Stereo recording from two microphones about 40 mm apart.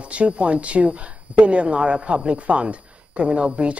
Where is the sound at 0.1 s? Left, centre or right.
Right.